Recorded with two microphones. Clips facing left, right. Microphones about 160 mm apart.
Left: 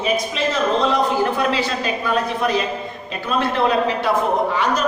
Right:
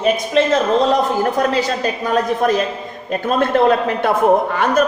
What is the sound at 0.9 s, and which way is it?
A woman's voice, 40° right (ahead or behind).